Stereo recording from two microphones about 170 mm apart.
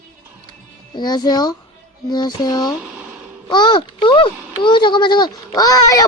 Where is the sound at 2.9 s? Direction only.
10° right (ahead or behind).